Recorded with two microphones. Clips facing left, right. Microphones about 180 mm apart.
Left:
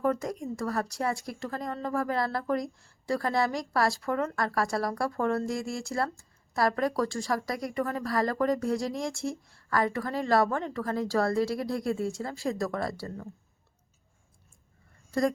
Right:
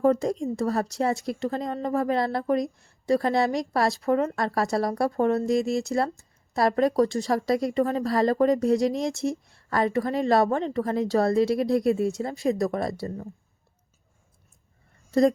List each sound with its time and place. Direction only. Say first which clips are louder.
0.0 s speech: right 7 dB; 25° right (ahead or behind)